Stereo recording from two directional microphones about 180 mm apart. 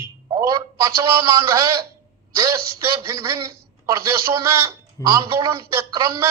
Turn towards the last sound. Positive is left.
turn(degrees=-15)  # may be behind; listen again after turning